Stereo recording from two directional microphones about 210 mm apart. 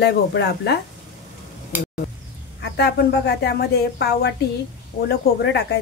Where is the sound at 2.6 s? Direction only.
50° left (ahead or behind).